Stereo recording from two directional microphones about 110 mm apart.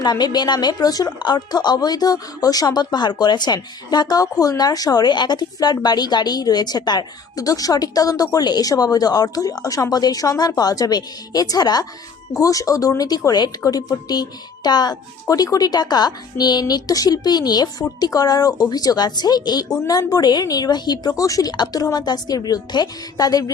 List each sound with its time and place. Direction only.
0.0 s a woman's voice: 40° left (ahead or behind)